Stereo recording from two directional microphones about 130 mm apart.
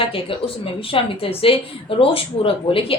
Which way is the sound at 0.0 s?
45° left (ahead or behind).